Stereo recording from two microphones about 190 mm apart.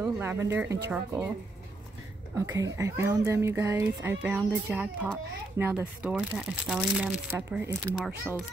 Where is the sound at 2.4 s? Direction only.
15° right (ahead or behind).